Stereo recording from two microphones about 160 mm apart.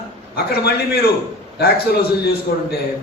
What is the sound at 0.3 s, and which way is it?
A man's voice, 80° left.